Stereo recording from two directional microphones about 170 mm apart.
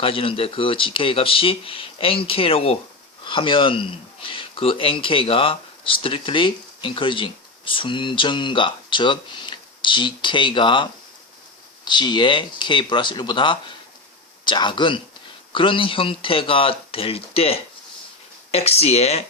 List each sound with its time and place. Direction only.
0.0 s speech: 30° left (ahead or behind)
11.9 s speech: 25° left (ahead or behind)